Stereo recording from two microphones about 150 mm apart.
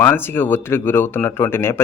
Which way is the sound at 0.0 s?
15° left (ahead or behind).